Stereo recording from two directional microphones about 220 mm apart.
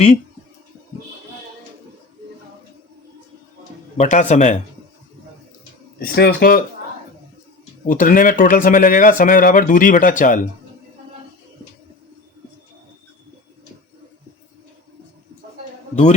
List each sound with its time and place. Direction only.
3.9 s speech: 30° left (ahead or behind)
6.0 s speech: 45° left (ahead or behind)
7.9 s speech: 40° left (ahead or behind)